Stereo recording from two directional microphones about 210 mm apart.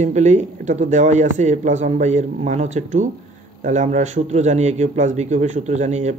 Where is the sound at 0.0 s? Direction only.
35° right (ahead or behind).